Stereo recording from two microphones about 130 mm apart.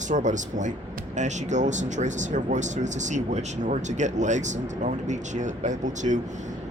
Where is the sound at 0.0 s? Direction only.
70° right (ahead or behind).